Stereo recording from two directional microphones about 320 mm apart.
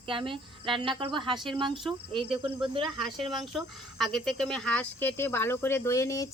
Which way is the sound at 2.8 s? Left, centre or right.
Centre.